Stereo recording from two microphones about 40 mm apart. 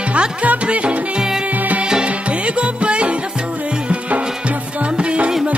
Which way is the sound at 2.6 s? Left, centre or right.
Right.